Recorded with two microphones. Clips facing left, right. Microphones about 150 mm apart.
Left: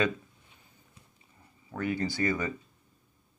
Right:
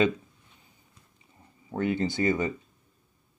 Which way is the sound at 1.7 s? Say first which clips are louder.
Right 4 dB; 25° right (ahead or behind).